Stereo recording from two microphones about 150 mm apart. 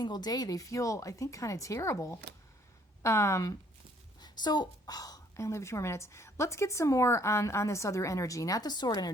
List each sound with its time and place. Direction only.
0.0 s a woman's voice: 25° left (ahead or behind)